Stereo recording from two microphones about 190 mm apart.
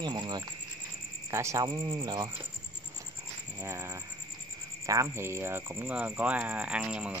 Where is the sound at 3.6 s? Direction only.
15° right (ahead or behind).